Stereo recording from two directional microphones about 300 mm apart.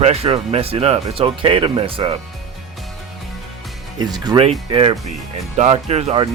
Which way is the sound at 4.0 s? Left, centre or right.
Centre.